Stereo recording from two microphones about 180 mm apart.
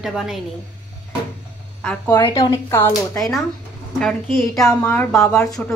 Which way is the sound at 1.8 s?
5° left (ahead or behind).